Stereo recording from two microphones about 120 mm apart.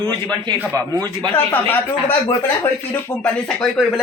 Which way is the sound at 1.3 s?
15° left (ahead or behind).